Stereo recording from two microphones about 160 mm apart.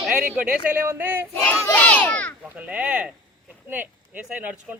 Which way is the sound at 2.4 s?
10° right (ahead or behind).